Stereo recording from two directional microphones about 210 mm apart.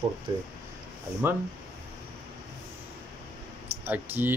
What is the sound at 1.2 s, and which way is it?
Speech, 10° right (ahead or behind).